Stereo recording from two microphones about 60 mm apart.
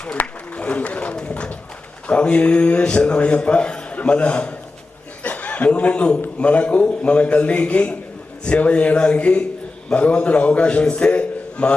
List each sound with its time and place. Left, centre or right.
0.0 s speech: left
5.2 s chuckle: left
6.4 s a man's voice: centre